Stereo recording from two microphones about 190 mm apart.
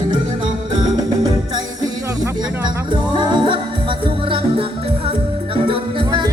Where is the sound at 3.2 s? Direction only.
25° right (ahead or behind).